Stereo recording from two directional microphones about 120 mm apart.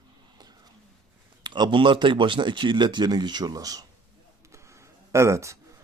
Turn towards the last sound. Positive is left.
turn(degrees=-25)  # may be behind; listen again after turning